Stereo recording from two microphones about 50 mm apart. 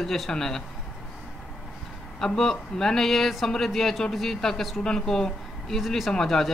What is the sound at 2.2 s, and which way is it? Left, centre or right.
Speech, centre.